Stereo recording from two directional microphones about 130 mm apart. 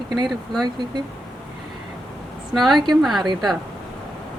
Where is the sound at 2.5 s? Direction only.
Centre (ahead or behind).